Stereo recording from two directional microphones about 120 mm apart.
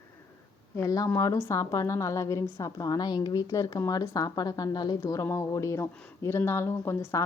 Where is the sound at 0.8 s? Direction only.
30° left (ahead or behind).